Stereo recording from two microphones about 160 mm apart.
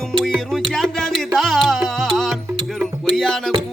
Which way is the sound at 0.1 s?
5° left (ahead or behind).